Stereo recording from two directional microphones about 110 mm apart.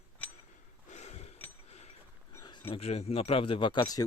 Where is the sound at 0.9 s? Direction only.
85° left.